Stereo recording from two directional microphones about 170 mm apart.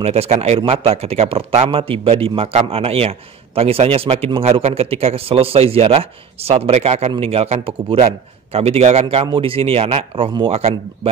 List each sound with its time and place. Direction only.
0.0 s speech: 35° right (ahead or behind)